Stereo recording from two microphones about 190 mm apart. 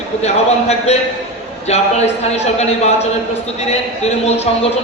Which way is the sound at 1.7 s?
35° left (ahead or behind).